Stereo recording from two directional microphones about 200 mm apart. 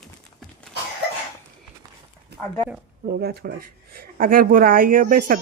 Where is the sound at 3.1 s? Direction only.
50° right (ahead or behind).